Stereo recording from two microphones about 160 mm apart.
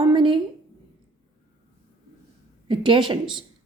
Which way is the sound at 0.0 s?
30° right (ahead or behind).